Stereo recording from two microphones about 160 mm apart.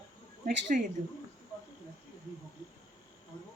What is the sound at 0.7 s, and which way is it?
Speech, 55° right (ahead or behind).